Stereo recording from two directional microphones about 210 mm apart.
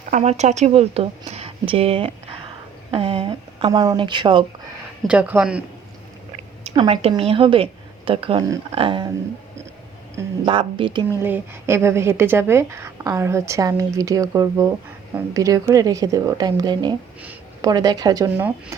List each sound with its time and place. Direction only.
0.1 s a woman's voice: 30° right (ahead or behind)
3.7 s a woman's voice: 15° right (ahead or behind)
5.0 s speech: 5° right (ahead or behind)
6.7 s a woman's voice: 25° right (ahead or behind)
10.4 s a woman's voice: 25° right (ahead or behind)
11.2 s a woman's voice: 10° right (ahead or behind)